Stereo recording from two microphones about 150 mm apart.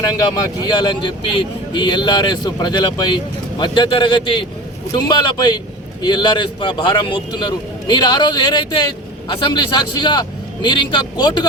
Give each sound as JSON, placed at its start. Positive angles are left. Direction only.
{"t": 0.2, "sound": "a man's voice", "side_deg": 25}